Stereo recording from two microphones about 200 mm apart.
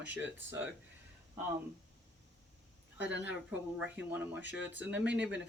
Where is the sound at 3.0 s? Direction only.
65° right (ahead or behind).